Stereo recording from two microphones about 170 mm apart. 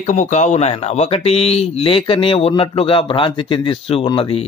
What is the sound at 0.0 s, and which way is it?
A man's voice, 45° left (ahead or behind).